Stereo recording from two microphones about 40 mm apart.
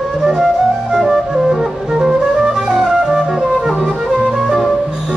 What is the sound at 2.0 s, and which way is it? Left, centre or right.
Music, centre.